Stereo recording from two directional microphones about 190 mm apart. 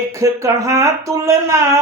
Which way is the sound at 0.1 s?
15° right (ahead or behind).